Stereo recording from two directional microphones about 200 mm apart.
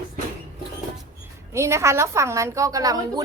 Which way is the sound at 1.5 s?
15° right (ahead or behind).